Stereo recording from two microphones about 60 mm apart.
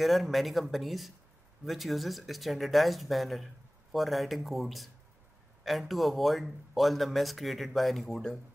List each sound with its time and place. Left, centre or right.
0.0 s speech: centre